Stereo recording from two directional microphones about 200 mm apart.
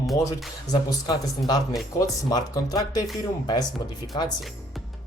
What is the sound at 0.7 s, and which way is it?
Speech, 20° left (ahead or behind).